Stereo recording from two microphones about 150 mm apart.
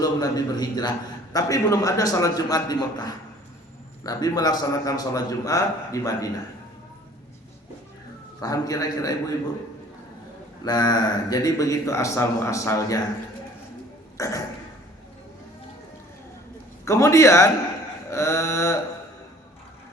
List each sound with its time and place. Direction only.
0.0 s a man's voice: 25° left (ahead or behind)
8.4 s a man's voice: 25° left (ahead or behind)
10.6 s a man's voice: 25° left (ahead or behind)
14.2 s speech: 20° left (ahead or behind)
16.8 s a man's voice: 20° left (ahead or behind)
18.1 s a sound: 15° left (ahead or behind)